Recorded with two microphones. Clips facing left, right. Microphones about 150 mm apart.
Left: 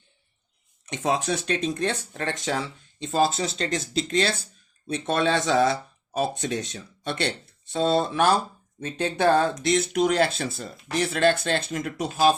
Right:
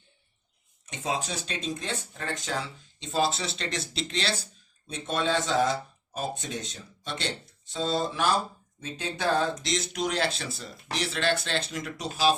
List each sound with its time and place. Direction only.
0.9 s speech: 65° left (ahead or behind)
3.0 s speech: 50° left (ahead or behind)
4.9 s speech: 70° left (ahead or behind); by 12.3 s 50° left (ahead or behind)